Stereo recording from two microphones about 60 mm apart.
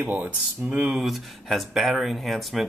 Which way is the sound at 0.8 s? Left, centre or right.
Centre.